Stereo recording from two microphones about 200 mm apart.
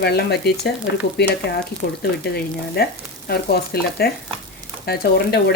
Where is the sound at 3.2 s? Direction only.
55° left (ahead or behind).